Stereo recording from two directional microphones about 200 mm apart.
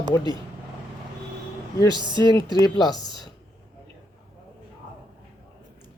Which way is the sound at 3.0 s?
25° right (ahead or behind).